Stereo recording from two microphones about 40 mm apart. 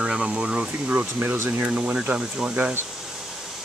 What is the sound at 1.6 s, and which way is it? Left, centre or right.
Speech, right.